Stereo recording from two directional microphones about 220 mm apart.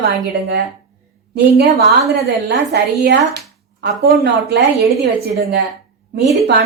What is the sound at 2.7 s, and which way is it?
Speech, 50° right (ahead or behind).